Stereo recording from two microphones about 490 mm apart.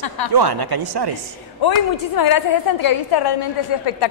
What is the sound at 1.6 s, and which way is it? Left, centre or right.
A woman's voice, left.